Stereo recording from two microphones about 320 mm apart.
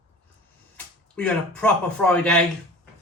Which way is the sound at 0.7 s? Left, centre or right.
Centre.